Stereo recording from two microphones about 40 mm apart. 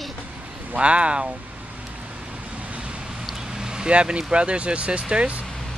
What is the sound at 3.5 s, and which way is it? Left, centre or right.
Speech, centre.